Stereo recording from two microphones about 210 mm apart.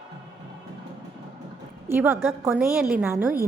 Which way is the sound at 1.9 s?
10° right (ahead or behind).